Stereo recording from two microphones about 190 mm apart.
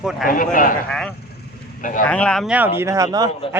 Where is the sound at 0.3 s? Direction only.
45° left (ahead or behind).